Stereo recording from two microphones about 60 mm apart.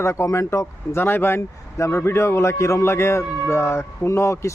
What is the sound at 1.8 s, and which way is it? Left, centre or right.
Speech, left.